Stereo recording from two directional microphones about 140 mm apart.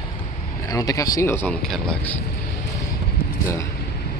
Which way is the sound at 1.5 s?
5° left (ahead or behind).